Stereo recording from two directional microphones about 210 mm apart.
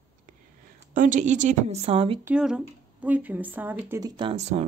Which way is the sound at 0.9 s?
40° right (ahead or behind).